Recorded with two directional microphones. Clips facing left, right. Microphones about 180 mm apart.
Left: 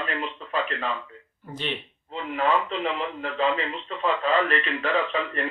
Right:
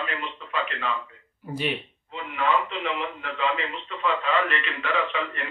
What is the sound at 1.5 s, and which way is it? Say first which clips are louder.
Speech: right 3 dB; 10° right (ahead or behind).